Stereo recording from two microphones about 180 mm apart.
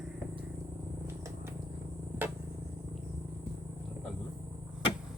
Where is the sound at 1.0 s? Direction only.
15° right (ahead or behind).